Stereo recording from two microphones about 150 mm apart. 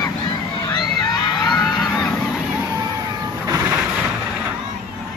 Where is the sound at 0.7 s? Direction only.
30° left (ahead or behind).